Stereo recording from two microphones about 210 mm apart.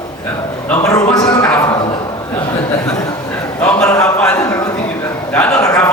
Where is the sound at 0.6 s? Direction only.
10° left (ahead or behind).